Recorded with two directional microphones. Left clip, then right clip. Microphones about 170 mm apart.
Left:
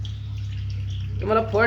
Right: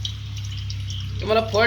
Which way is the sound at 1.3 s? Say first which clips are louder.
Right 1 dB; 30° left (ahead or behind).